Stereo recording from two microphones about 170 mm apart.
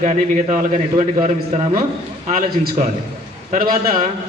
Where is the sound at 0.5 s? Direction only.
45° right (ahead or behind).